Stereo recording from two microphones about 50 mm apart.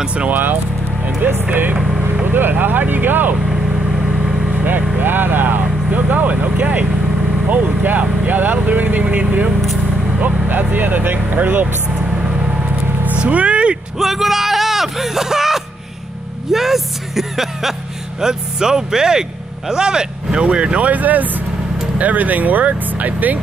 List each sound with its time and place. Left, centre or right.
0.0 s speech: right
0.3 s speech: right
4.5 s lawn mower: right
4.9 s speech: right
13.2 s vehicle: right
13.9 s speech: centre; by 23.4 s right